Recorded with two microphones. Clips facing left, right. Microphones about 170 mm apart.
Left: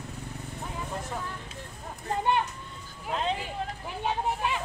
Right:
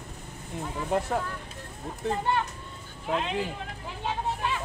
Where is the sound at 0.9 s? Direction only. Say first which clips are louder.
Right 12 dB; 70° right (ahead or behind).